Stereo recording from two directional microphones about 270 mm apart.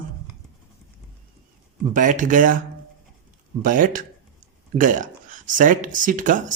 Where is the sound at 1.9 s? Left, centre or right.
Right.